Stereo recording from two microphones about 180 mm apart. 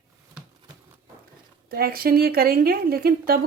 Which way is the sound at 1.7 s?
55° right (ahead or behind).